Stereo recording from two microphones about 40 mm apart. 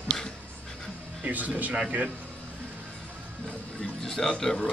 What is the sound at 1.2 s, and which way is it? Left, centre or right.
Speech, right.